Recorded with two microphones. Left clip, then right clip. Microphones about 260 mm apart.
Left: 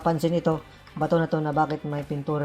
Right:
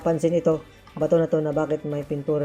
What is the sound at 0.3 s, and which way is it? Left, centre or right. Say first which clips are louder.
Speech: right 4 dB; left.